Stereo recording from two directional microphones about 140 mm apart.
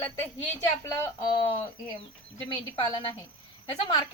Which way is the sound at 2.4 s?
35° left (ahead or behind).